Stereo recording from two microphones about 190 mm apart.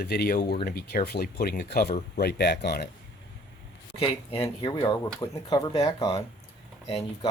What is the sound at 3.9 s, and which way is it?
Speech, 30° left (ahead or behind).